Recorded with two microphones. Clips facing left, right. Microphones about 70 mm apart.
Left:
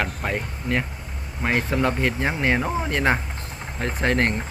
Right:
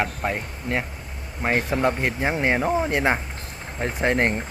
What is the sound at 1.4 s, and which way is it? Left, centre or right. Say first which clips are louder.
Speech: right 1 dB; centre.